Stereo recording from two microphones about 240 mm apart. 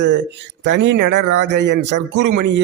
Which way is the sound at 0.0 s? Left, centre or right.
Right.